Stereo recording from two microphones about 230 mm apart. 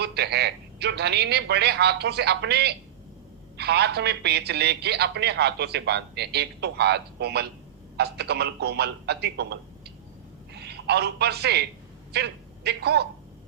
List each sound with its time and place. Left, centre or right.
0.0 s a man's voice: right